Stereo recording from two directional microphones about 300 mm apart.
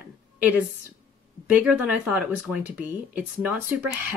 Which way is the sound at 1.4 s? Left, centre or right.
Centre.